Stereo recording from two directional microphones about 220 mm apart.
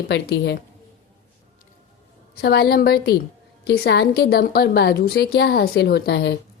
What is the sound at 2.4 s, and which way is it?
A woman's voice, 45° left (ahead or behind).